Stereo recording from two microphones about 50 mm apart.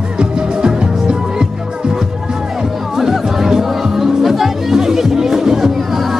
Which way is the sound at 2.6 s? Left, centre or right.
Centre.